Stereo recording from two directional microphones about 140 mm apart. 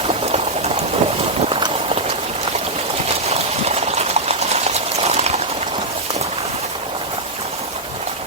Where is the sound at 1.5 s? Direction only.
40° right (ahead or behind).